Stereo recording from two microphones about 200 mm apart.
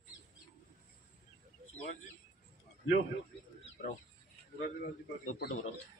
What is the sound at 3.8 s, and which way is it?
Speech, 55° left (ahead or behind).